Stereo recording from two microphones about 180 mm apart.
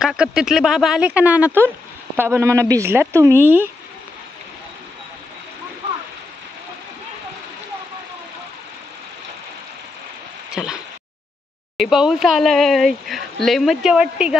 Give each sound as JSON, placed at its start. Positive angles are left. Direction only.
{"t": 0.0, "sound": "speech", "side_deg": -5}
{"t": 10.5, "sound": "a sound", "side_deg": -5}
{"t": 11.7, "sound": "speech", "side_deg": 0}